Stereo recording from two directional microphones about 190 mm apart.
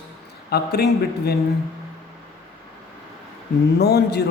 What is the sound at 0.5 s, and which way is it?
Speech, 55° left (ahead or behind).